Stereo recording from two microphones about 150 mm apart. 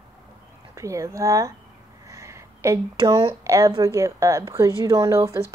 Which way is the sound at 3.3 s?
20° right (ahead or behind).